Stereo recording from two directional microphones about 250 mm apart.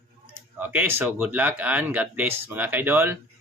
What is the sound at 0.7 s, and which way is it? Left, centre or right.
A man's voice, centre.